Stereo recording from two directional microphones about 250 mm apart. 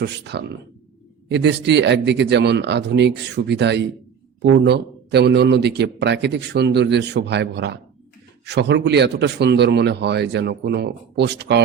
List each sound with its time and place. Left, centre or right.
0.0 s a man's voice: right